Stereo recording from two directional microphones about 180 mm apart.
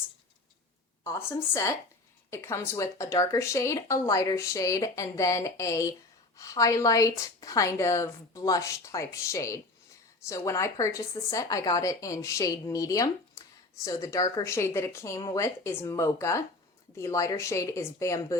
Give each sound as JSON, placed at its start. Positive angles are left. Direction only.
{"t": 1.0, "sound": "speech", "side_deg": 15}